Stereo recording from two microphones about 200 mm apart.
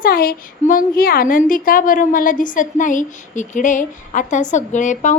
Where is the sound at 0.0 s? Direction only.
50° left (ahead or behind).